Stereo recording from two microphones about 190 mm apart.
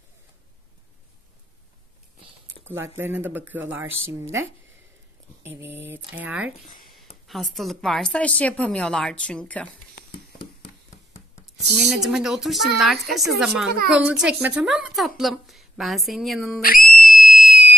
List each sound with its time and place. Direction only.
3.0 s speech: 10° right (ahead or behind)
5.7 s speech: 70° right (ahead or behind)
6.1 s a woman's voice: 5° right (ahead or behind)
11.7 s a woman's voice: centre (ahead or behind)
16.6 s screaming: 50° left (ahead or behind)